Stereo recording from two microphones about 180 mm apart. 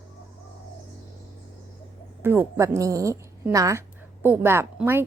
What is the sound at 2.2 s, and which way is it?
A woman's voice, 10° right (ahead or behind).